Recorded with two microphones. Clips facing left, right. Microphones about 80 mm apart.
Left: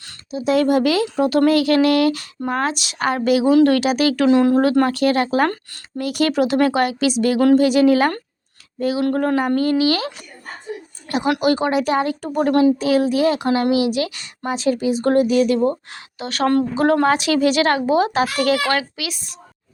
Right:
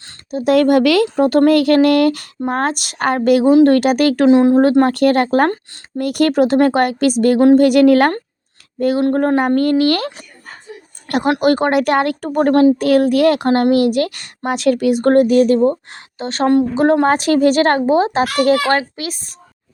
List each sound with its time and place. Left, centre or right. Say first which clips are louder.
0.3 s speech: right 4 dB; right
1.1 s a woman's voice: right 4 dB; right
3.5 s a woman's voice: right 3 dB; right
3.8 s a woman's voice: right 4 dB; right
4.3 s speech: right 4 dB; right
4.9 s a woman's voice: right 4 dB; right
9.0 s a woman's voice: right 2 dB; right
9.6 s a woman's voice: right 3 dB; right
11.3 s a woman's voice: right 4 dB; right
17.1 s a woman's voice: right 4 dB; right